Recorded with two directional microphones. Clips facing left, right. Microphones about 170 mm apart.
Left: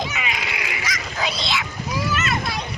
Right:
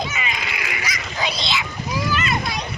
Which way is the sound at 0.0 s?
5° left (ahead or behind).